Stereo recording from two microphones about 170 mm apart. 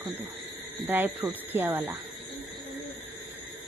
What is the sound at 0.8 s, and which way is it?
Speech, 10° right (ahead or behind).